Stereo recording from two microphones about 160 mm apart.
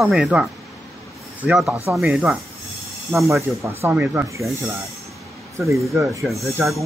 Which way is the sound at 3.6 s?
15° right (ahead or behind).